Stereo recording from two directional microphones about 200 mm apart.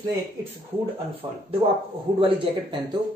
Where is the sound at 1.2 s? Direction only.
20° right (ahead or behind).